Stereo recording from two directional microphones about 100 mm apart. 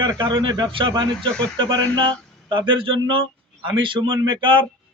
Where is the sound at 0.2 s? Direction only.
50° right (ahead or behind).